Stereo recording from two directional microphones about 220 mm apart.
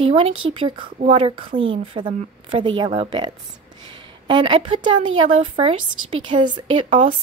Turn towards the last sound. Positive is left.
turn(degrees=-25)  # may be behind; listen again after turning